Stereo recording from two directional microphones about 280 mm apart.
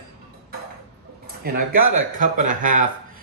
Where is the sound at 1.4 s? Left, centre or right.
Right.